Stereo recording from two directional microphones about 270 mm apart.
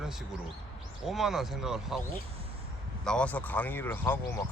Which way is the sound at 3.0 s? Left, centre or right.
Centre.